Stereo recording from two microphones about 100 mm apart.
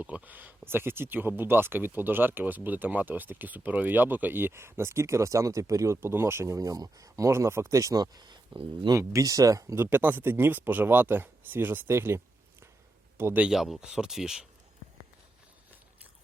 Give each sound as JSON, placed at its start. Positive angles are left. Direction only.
{"t": 0.0, "sound": "speech", "side_deg": -15}
{"t": 9.0, "sound": "speech", "side_deg": -35}
{"t": 9.7, "sound": "speech", "side_deg": -25}
{"t": 13.5, "sound": "speech", "side_deg": -5}